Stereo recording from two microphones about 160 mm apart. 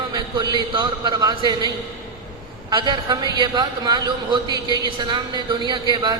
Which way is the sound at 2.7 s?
30° right (ahead or behind).